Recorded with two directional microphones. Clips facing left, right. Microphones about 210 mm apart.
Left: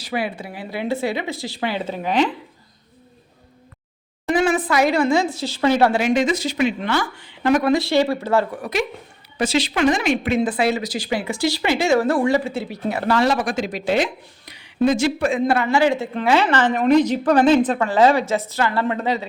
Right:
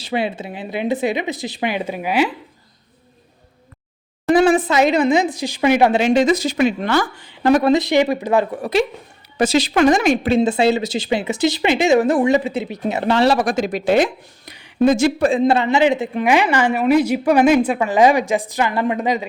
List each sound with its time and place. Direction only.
0.0 s a woman's voice: 25° right (ahead or behind)
4.3 s a woman's voice: 35° right (ahead or behind)
7.7 s a woman's voice: 20° right (ahead or behind)
9.4 s a woman's voice: 45° right (ahead or behind)
15.3 s a woman's voice: 25° right (ahead or behind)